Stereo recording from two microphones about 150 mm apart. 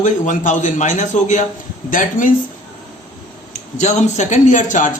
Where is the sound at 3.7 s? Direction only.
50° left (ahead or behind).